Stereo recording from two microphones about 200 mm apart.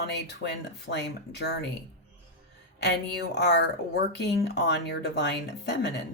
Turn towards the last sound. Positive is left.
turn(degrees=60)  # may be behind; listen again after turning